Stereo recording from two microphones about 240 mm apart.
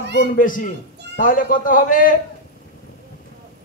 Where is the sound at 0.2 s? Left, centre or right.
Left.